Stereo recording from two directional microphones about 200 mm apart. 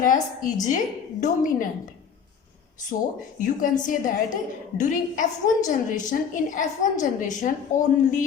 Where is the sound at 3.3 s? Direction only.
40° left (ahead or behind).